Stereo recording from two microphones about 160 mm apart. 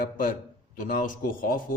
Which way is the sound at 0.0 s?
60° left (ahead or behind).